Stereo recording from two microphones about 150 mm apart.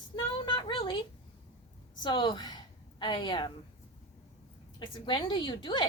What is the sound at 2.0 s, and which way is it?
A woman's voice, 30° left (ahead or behind).